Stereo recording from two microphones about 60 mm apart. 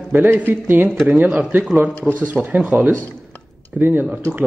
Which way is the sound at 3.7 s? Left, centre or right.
Right.